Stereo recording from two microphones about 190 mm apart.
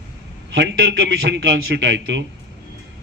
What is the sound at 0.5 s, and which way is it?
A man's voice, 70° right (ahead or behind).